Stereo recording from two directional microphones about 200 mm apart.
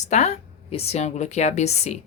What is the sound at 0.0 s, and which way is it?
A woman's voice, 35° left (ahead or behind).